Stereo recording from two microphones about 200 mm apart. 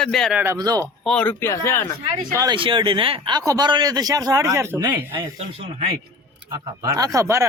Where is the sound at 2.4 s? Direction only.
25° right (ahead or behind).